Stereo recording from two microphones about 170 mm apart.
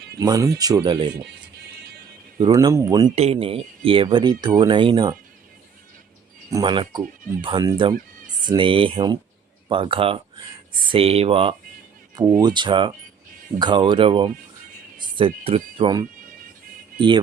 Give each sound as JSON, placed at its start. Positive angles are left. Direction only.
{"t": 0.2, "sound": "speech", "side_deg": -20}
{"t": 2.4, "sound": "speech", "side_deg": -20}
{"t": 3.3, "sound": "speech", "side_deg": -35}
{"t": 6.5, "sound": "speech", "side_deg": -25}
{"t": 12.1, "sound": "speech", "side_deg": -20}